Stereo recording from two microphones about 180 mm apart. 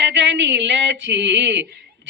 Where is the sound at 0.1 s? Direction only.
85° right.